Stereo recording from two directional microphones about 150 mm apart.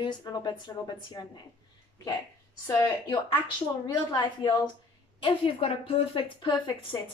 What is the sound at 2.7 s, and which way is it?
A woman's voice, 25° left (ahead or behind).